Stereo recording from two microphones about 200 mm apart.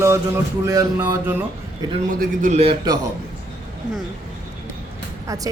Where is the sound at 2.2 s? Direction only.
35° right (ahead or behind).